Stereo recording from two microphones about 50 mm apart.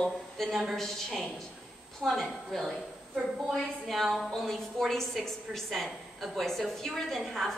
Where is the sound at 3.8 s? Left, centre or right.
Centre.